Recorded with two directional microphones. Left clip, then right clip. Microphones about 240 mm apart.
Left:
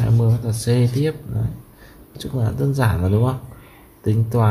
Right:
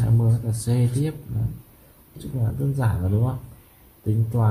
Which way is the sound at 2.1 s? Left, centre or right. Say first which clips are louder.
Left 7 dB; centre.